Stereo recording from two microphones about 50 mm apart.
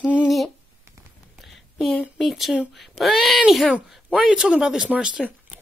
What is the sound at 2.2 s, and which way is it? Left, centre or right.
Speech, centre.